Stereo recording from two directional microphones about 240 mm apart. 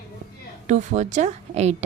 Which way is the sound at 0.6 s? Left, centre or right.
Right.